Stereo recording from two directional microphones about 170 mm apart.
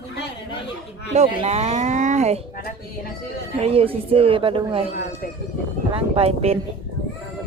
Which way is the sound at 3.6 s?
35° right (ahead or behind).